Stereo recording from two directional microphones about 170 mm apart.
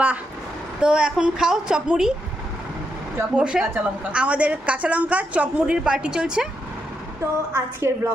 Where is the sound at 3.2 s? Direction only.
5° right (ahead or behind).